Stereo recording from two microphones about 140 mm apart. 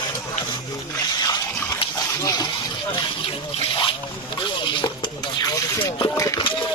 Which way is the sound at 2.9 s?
40° left (ahead or behind).